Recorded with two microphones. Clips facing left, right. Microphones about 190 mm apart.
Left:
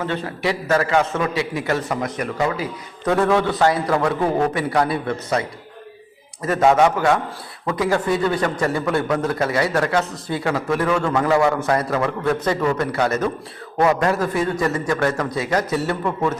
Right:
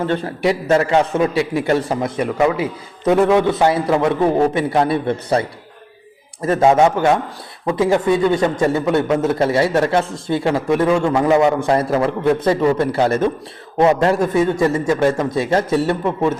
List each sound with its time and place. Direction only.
0.3 s a man's voice: 25° right (ahead or behind)